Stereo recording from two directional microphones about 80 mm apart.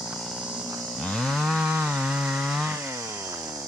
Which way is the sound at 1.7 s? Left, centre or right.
Centre.